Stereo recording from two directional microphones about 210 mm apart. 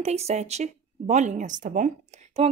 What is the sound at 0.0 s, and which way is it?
A woman's voice, 30° right (ahead or behind).